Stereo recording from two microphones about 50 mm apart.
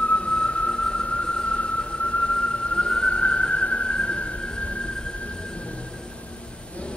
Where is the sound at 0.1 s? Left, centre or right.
Left.